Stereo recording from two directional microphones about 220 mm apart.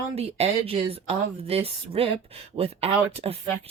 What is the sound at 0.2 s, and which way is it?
Speech, 30° right (ahead or behind).